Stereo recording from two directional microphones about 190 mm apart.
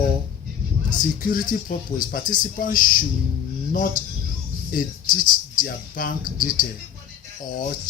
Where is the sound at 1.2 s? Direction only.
45° left (ahead or behind).